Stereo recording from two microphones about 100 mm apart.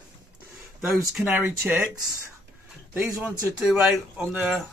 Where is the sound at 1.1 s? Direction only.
15° right (ahead or behind).